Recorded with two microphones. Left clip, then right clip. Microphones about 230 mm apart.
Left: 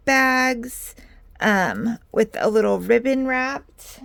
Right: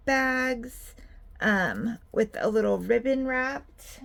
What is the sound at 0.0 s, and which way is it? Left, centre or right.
Speech, left.